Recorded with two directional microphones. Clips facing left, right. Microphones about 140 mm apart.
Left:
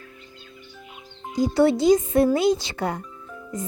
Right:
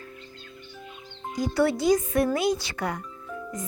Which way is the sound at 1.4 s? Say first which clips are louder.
Left 5 dB; 25° left (ahead or behind).